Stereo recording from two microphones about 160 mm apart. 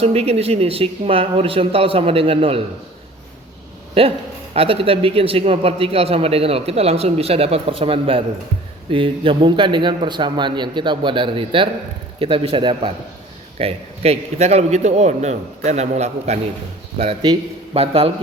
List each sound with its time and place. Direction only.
0.0 s a man's voice: 40° right (ahead or behind)
4.0 s a man's voice: 35° right (ahead or behind)
17.0 s a man's voice: 35° right (ahead or behind)